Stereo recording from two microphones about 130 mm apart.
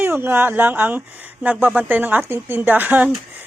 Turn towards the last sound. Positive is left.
turn(degrees=-10)  # may be behind; listen again after turning